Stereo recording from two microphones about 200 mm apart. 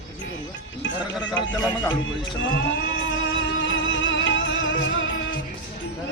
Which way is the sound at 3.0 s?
70° left (ahead or behind).